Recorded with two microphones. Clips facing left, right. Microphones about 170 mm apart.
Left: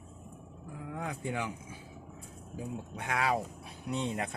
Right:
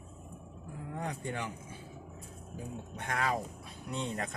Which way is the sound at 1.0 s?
5° left (ahead or behind).